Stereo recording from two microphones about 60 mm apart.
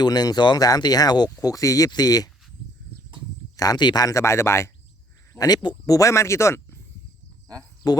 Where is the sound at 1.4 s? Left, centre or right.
Left.